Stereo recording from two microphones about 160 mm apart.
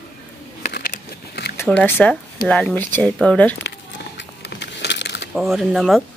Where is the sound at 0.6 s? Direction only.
75° left (ahead or behind).